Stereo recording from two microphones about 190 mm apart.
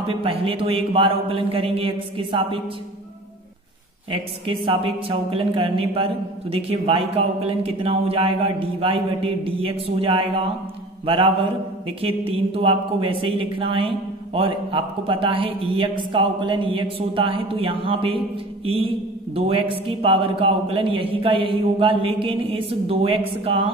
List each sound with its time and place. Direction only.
0.0 s speech: 30° right (ahead or behind)
4.1 s speech: 25° right (ahead or behind)
12.0 s speech: 30° right (ahead or behind)
19.3 s speech: 30° right (ahead or behind)